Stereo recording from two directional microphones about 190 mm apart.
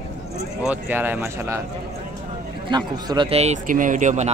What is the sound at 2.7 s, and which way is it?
Speech, 20° right (ahead or behind).